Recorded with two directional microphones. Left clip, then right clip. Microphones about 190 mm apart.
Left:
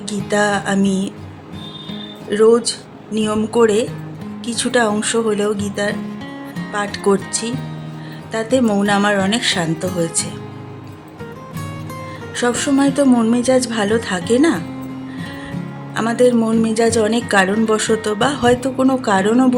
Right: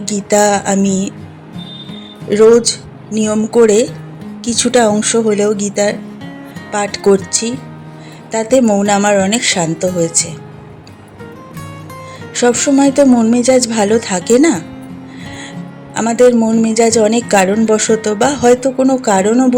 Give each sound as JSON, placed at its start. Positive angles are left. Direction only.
{"t": 0.0, "sound": "a woman's voice", "side_deg": -15}
{"t": 2.3, "sound": "a woman's voice", "side_deg": -15}
{"t": 12.3, "sound": "a woman's voice", "side_deg": -15}
{"t": 16.0, "sound": "a woman's voice", "side_deg": -15}